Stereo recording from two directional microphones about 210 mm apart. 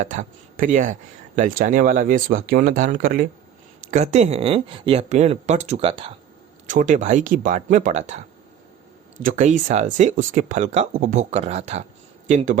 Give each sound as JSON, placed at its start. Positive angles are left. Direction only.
{"t": 0.0, "sound": "speech", "side_deg": -35}
{"t": 6.7, "sound": "speech", "side_deg": -35}
{"t": 9.2, "sound": "speech", "side_deg": -35}